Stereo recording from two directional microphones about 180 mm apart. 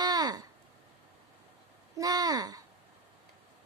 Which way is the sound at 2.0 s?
20° right (ahead or behind).